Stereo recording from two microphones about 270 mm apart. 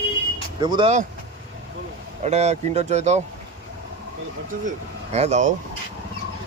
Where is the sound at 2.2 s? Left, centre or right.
Right.